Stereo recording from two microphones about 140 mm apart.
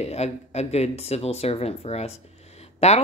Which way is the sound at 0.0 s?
50° left (ahead or behind).